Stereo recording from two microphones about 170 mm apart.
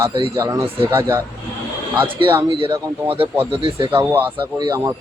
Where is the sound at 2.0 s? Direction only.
30° right (ahead or behind).